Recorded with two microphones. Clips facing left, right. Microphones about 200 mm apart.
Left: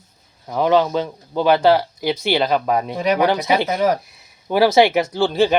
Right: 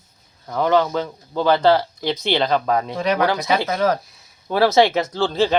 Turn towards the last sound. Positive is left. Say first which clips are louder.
# left 2 dB
turn(degrees=15)  # may be behind; listen again after turning